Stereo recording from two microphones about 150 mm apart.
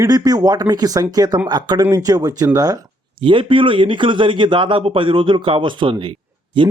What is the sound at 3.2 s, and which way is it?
A man's voice, 35° right (ahead or behind).